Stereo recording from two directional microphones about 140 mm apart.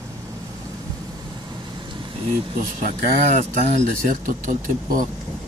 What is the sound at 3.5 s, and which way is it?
Speech, 60° right (ahead or behind).